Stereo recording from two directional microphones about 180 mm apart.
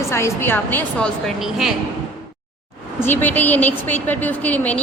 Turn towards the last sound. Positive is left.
turn(degrees=10)  # may be behind; listen again after turning